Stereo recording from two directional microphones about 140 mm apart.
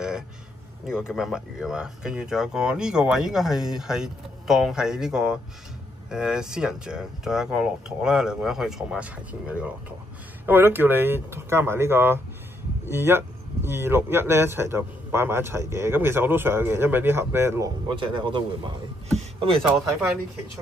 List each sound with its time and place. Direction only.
0.8 s speech: 5° right (ahead or behind)
17.8 s speech: 35° right (ahead or behind)
19.8 s speech: centre (ahead or behind)